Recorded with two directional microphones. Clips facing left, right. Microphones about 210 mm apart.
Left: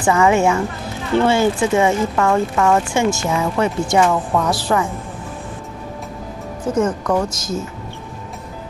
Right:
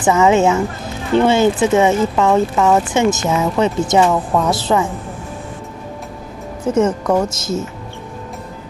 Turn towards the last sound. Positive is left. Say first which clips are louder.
# right 3 dB
turn(degrees=-25)  # may be behind; listen again after turning